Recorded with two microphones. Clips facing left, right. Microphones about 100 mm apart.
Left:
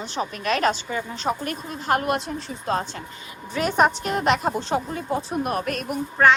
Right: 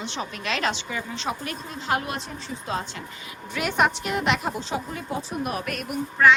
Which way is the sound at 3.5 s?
35° left (ahead or behind).